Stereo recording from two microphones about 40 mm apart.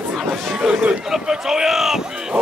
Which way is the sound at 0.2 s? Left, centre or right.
Centre.